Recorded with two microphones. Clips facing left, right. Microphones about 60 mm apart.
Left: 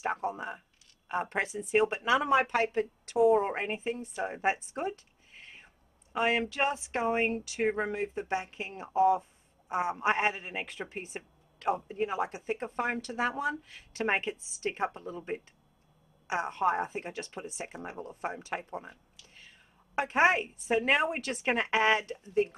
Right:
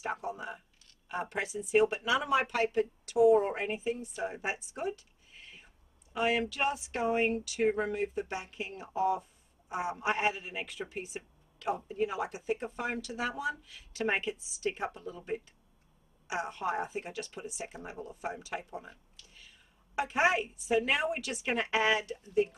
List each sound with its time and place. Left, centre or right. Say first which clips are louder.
0.0 s a sound: left 4 dB; left
1.0 s a man's voice: left 3 dB; left
20.0 s a man's voice: left 3 dB; left